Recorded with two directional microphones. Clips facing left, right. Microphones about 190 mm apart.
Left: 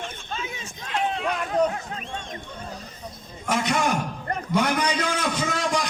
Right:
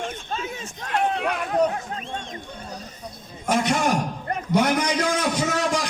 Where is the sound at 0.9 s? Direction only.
55° right (ahead or behind).